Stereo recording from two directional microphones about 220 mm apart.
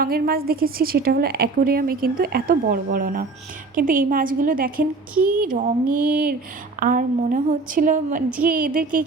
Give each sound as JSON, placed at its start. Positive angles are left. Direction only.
{"t": 0.0, "sound": "a woman's voice", "side_deg": -45}